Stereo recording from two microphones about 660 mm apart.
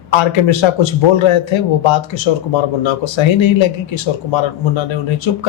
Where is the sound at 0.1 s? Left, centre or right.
Left.